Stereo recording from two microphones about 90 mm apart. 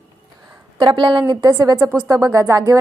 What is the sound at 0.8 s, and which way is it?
Speech, 60° right (ahead or behind).